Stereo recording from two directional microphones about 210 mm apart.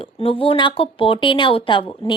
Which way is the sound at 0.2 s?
25° left (ahead or behind).